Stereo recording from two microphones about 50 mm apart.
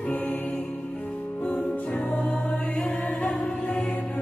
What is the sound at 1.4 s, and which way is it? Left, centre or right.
Music, left.